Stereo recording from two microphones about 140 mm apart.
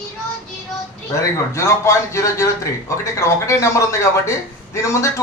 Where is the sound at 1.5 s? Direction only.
20° left (ahead or behind).